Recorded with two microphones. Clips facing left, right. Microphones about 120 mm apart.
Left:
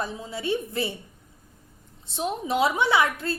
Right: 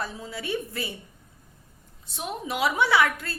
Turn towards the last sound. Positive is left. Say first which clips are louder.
# even
turn(degrees=25)  # may be behind; listen again after turning